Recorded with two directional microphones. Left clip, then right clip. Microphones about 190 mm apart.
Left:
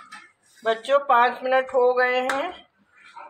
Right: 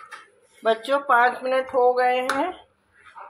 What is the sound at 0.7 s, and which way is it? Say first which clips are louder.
Speech: even; 20° right (ahead or behind).